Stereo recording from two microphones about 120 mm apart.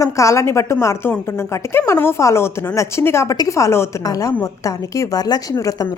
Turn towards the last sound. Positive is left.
turn(degrees=30)  # may be behind; listen again after turning